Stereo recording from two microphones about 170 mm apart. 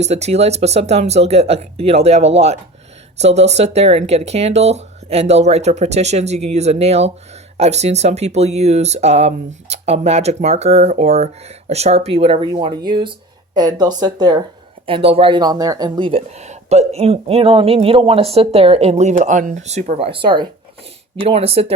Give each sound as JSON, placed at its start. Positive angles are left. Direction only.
{"t": 0.0, "sound": "speech", "side_deg": -40}